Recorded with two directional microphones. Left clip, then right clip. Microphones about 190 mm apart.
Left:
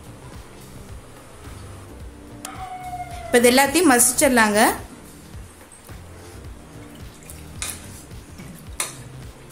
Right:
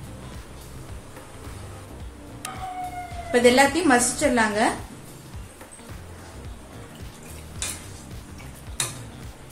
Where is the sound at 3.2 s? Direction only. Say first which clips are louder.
Left 1 dB; 55° left (ahead or behind).